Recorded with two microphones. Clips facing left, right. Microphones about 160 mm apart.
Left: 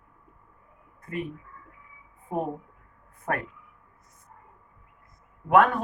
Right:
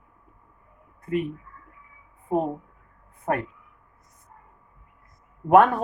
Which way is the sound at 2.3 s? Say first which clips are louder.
Right 5 dB; 25° right (ahead or behind).